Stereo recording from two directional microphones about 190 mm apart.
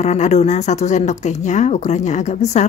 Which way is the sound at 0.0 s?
40° left (ahead or behind).